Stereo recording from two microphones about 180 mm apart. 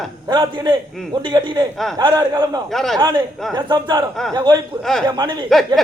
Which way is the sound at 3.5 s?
25° right (ahead or behind).